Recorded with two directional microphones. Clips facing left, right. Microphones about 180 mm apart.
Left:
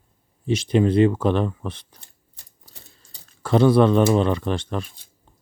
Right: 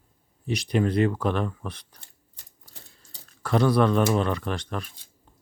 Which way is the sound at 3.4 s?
25° left (ahead or behind).